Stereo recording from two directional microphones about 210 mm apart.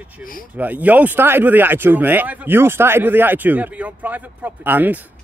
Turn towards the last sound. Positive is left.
turn(degrees=-10)  # may be behind; listen again after turning